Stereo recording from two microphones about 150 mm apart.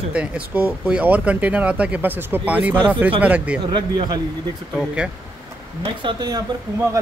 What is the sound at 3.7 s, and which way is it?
Speech, 30° right (ahead or behind).